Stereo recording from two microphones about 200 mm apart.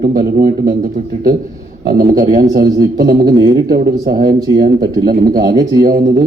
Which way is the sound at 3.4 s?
20° right (ahead or behind).